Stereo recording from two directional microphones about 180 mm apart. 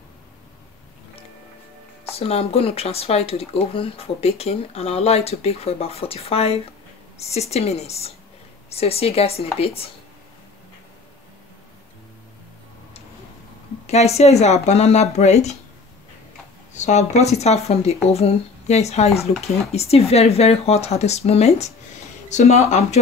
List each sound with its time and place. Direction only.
2.0 s speech: 35° left (ahead or behind)
13.8 s speech: 35° left (ahead or behind)
16.7 s speech: 40° left (ahead or behind)